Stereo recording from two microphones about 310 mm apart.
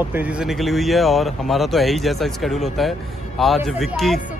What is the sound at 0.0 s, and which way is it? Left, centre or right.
Speech, centre.